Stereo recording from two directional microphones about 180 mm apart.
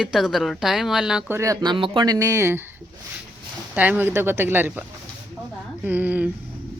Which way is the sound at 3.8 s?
10° right (ahead or behind).